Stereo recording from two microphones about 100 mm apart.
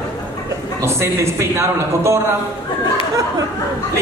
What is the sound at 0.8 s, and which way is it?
A man's voice, 25° right (ahead or behind).